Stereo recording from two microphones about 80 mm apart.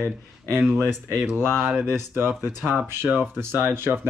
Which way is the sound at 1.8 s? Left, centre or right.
Right.